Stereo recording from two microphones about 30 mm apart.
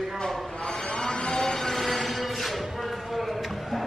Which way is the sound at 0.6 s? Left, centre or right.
Left.